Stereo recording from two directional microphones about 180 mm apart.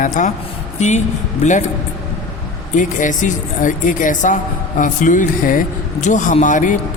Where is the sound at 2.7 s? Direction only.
45° left (ahead or behind).